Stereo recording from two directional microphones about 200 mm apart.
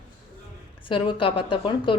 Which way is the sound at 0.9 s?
25° left (ahead or behind).